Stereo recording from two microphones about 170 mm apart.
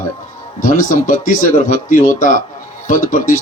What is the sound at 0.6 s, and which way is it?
Speech, 50° left (ahead or behind).